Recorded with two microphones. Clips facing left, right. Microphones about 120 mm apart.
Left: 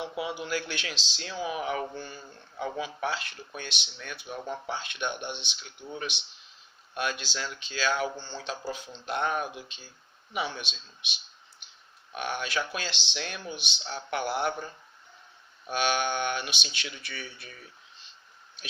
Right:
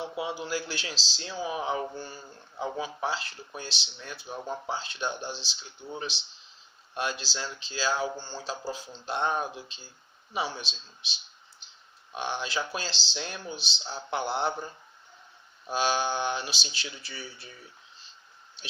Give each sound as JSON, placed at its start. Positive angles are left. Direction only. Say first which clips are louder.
{"t": 0.2, "sound": "speech", "louder": "even", "side_deg": -30}
{"t": 11.6, "sound": "grunt", "louder": "even", "side_deg": -30}
{"t": 12.1, "sound": "speech", "louder": "even", "side_deg": -25}
{"t": 15.7, "sound": "speech", "louder": "even", "side_deg": -30}